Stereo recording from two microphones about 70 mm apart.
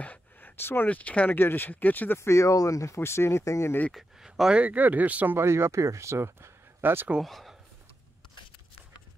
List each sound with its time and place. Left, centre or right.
0.0 s a sound: left
0.8 s speech: left
2.1 s speech: left
3.9 s speech: centre; by 7.1 s right
7.2 s speech: centre